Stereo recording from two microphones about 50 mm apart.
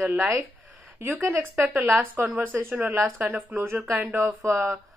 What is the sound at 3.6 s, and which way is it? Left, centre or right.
Speech, right.